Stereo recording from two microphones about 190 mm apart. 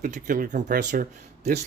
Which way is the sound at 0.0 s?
45° right (ahead or behind).